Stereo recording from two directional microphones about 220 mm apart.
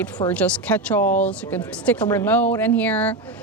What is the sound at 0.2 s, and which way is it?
A woman's voice, 5° left (ahead or behind).